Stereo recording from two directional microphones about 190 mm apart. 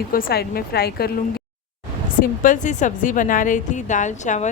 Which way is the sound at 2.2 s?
45° left (ahead or behind).